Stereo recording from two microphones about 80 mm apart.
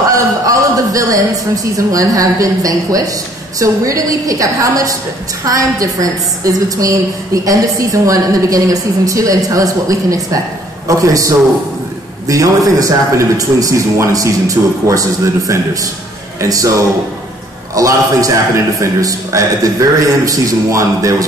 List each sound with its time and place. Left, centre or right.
0.1 s a man's voice: right
17.7 s a man's voice: right